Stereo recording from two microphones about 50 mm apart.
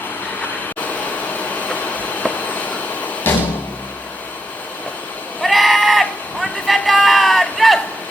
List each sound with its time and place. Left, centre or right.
0.9 s train: left
3.3 s music: left
5.4 s sheep: centre
6.7 s music: centre